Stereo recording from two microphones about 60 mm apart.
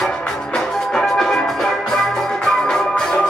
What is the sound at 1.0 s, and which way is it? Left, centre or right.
Music, centre.